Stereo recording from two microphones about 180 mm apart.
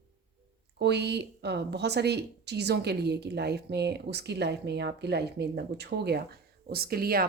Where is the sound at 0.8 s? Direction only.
70° right (ahead or behind).